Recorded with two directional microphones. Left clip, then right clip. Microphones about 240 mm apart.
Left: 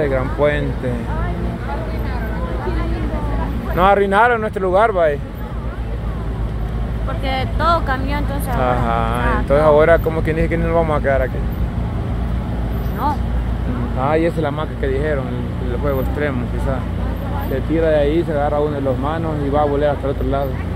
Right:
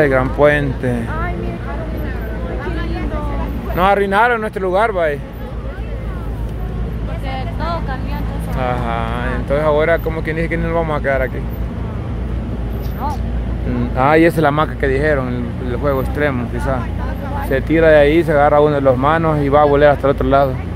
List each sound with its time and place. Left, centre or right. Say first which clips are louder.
0.0 s speech: right 5 dB; right
3.7 s speech: even; centre
7.2 s speech: left 7 dB; left
8.5 s speech: left 2 dB; centre
13.9 s speech: right 6 dB; right; by 16.3 s centre
17.7 s speech: right 6 dB; right